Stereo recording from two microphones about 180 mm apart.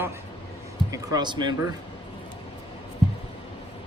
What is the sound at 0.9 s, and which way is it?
Speech, 20° right (ahead or behind).